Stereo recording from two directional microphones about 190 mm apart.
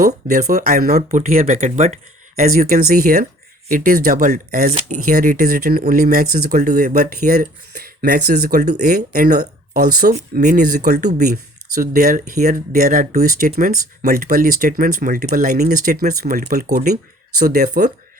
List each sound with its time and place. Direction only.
0.4 s speech: 50° right (ahead or behind)